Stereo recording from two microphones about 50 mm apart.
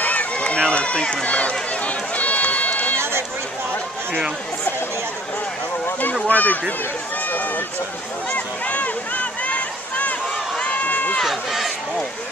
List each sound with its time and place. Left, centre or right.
0.0 s run: left
6.2 s a sound: left
7.2 s speech: left
8.3 s a sound: left
10.6 s run: left
11.2 s speech: centre